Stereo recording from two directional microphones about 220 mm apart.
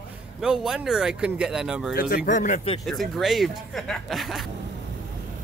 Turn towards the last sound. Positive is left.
turn(degrees=0)  # may be behind; listen again after turning